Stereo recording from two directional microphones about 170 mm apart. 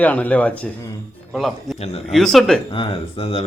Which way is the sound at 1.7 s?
40° left (ahead or behind).